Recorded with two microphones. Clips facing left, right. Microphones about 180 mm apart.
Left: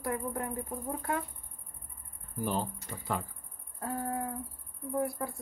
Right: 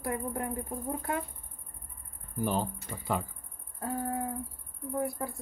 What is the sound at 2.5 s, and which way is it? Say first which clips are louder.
Speech: right 2 dB; 5° right (ahead or behind).